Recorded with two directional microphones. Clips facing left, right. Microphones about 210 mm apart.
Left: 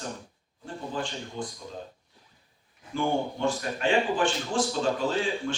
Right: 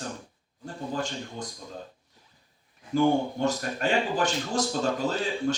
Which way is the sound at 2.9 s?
40° right (ahead or behind).